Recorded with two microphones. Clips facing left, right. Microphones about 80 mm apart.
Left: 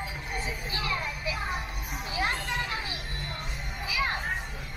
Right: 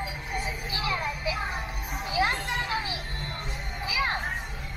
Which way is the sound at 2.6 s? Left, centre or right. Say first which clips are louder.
Right 4 dB; right.